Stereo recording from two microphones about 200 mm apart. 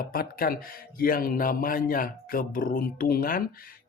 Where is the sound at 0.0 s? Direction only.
45° left (ahead or behind).